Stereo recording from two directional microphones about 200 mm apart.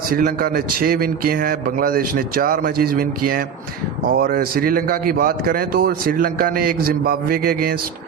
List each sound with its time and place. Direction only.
0.1 s a man's voice: 45° right (ahead or behind)